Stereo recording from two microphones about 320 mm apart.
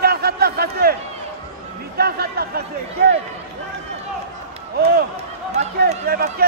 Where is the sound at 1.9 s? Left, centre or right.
Right.